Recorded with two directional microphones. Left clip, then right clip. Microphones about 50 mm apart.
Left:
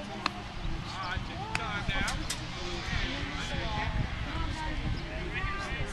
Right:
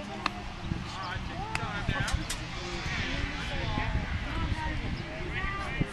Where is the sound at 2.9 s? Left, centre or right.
Right.